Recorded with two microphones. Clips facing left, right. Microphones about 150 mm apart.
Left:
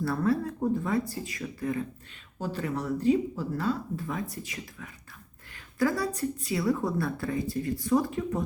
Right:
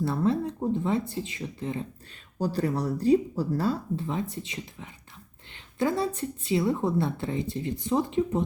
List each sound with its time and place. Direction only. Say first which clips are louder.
0.0 s a woman's voice: right 1 dB; 20° right (ahead or behind)
2.4 s a woman's voice: right 5 dB; 35° right (ahead or behind)